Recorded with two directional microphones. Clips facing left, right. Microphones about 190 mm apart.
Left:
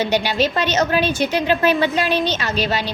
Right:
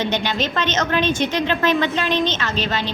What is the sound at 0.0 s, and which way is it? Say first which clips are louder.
A woman's voice: left 3 dB; 10° left (ahead or behind).